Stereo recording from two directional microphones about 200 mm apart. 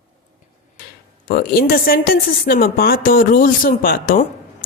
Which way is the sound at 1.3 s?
50° left (ahead or behind).